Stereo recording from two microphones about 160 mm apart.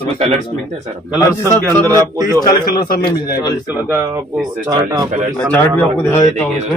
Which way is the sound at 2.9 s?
70° left (ahead or behind).